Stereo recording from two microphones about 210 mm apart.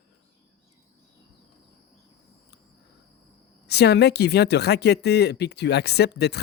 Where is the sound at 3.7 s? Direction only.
55° left (ahead or behind).